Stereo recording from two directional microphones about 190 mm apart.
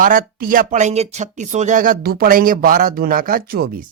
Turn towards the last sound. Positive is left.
turn(degrees=-50)  # may be behind; listen again after turning